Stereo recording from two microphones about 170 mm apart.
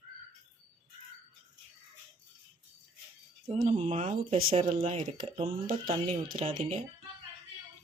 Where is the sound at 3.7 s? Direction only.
35° right (ahead or behind).